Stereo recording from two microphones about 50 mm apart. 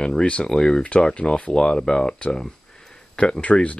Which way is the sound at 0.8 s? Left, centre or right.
Left.